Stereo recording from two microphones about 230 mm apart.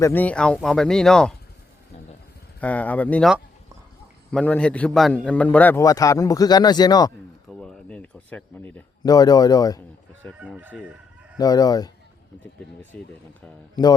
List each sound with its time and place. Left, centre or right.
0.0 s speech: centre
2.6 s a man's voice: centre
7.5 s speech: centre
10.2 s speech: centre
11.3 s a man's voice: centre